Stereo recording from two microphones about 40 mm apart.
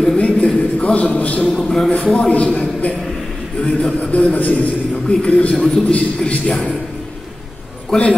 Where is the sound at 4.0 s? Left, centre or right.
Left.